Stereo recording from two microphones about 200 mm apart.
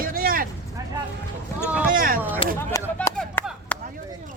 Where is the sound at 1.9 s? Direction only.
45° right (ahead or behind).